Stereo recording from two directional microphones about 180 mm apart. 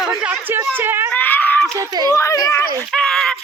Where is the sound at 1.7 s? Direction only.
20° right (ahead or behind).